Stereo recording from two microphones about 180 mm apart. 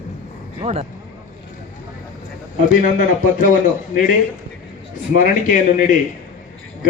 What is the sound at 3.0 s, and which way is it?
Speech, 45° left (ahead or behind).